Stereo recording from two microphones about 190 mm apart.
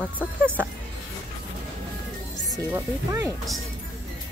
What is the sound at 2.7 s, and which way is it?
Speech, 15° right (ahead or behind).